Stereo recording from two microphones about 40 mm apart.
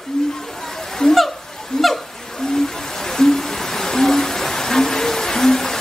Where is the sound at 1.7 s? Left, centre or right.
Centre.